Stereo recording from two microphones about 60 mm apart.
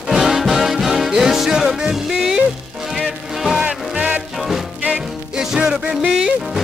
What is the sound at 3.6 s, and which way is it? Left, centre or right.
Music, centre.